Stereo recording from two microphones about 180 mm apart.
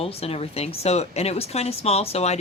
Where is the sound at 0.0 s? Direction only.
35° left (ahead or behind).